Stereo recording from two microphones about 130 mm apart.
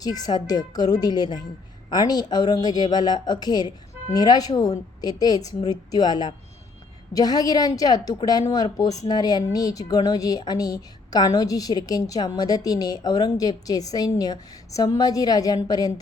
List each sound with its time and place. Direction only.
0.0 s a woman's voice: 30° left (ahead or behind)